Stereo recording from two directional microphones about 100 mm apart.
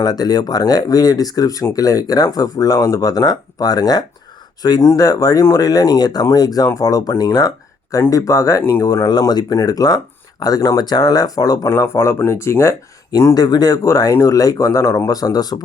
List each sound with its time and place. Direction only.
0.0 s speech: 40° left (ahead or behind)